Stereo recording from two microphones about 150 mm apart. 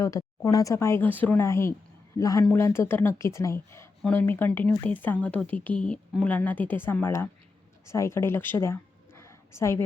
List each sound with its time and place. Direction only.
0.0 s a woman's voice: 20° left (ahead or behind)